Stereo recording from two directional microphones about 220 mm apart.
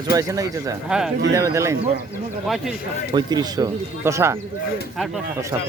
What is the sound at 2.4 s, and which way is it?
Speech, centre (ahead or behind).